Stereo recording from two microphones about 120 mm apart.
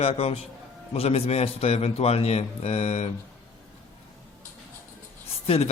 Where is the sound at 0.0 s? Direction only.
55° left (ahead or behind).